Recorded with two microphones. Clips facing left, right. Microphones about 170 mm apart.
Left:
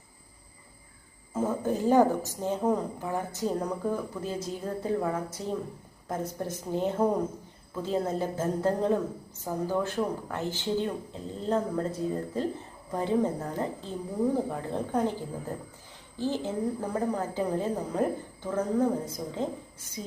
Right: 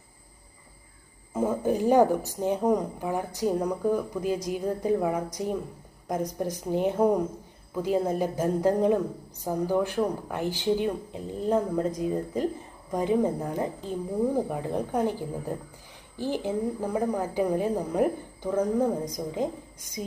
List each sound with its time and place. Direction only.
1.3 s a woman's voice: 15° right (ahead or behind)